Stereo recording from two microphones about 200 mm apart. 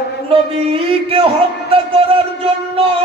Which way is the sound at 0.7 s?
30° right (ahead or behind).